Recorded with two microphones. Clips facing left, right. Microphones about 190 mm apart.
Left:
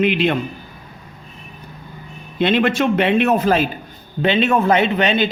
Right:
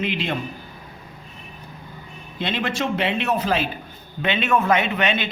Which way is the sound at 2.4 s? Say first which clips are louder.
Left 9 dB; 60° left (ahead or behind).